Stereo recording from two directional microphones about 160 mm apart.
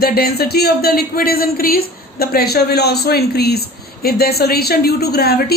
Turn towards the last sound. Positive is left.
turn(degrees=80)